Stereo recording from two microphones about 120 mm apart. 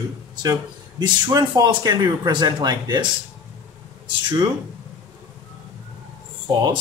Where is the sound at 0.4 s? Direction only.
35° right (ahead or behind).